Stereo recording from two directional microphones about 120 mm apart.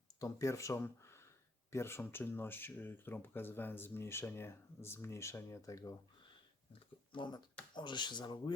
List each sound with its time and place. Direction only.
0.2 s speech: 25° left (ahead or behind)
7.2 s speech: 35° left (ahead or behind)